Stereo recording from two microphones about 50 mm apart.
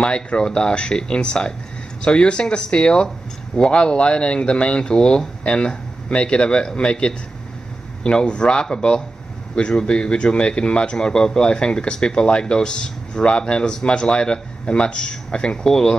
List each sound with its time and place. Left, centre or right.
0.0 s a man's voice: centre